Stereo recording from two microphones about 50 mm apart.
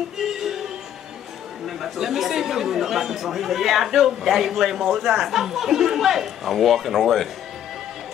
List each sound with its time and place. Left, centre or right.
0.2 s music: centre
1.8 s speech: centre